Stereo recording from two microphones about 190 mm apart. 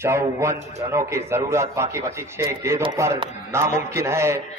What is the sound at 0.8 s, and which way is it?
A man's voice, 15° right (ahead or behind).